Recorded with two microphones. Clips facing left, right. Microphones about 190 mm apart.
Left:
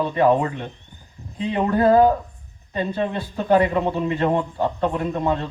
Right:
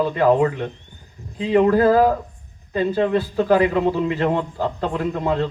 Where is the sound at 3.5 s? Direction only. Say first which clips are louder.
Even; 25° left (ahead or behind).